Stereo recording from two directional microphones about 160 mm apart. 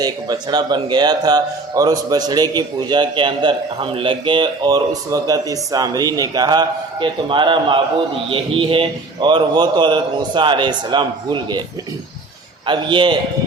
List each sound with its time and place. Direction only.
0.0 s a man's voice: 25° right (ahead or behind)
12.6 s a man's voice: 30° right (ahead or behind)